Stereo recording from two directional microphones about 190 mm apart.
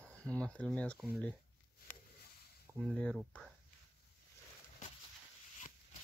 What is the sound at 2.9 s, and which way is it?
Speech, 5° left (ahead or behind).